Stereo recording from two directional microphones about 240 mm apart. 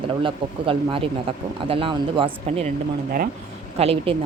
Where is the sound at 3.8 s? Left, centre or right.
Right.